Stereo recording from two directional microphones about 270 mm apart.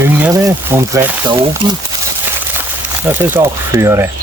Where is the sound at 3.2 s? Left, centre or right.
Centre.